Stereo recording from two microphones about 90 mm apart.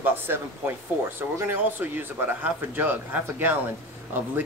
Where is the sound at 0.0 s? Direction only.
20° right (ahead or behind).